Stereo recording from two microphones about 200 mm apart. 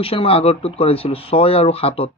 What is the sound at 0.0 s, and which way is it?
Speech, 30° left (ahead or behind).